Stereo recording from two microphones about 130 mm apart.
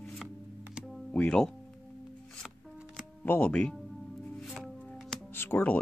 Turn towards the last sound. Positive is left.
turn(degrees=15)  # may be behind; listen again after turning